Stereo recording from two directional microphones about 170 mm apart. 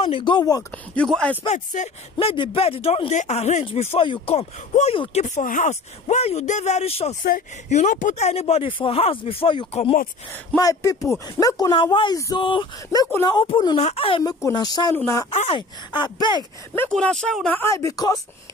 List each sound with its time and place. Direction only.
0.0 s speech: 30° left (ahead or behind)
0.9 s speech: 5° left (ahead or behind)
1.4 s speech: 45° left (ahead or behind)
5.3 s speech: 50° left (ahead or behind)
7.7 s speech: 45° left (ahead or behind)
10.3 s speech: 15° left (ahead or behind)
15.2 s speech: 35° left (ahead or behind)
16.7 s speech: 10° left (ahead or behind)